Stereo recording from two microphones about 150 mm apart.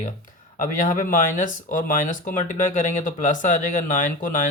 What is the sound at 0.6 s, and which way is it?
Speech, 60° left (ahead or behind).